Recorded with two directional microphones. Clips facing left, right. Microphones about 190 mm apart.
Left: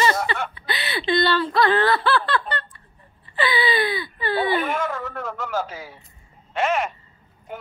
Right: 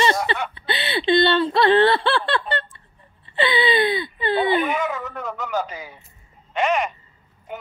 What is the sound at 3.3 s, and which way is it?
Whimper, 25° right (ahead or behind).